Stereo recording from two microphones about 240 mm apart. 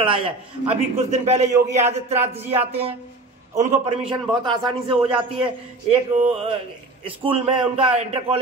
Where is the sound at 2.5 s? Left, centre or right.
Right.